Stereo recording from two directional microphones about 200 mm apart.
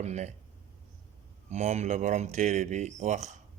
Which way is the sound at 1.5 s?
35° right (ahead or behind).